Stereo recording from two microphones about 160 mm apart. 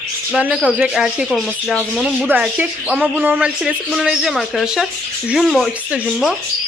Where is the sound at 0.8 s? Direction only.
5° right (ahead or behind).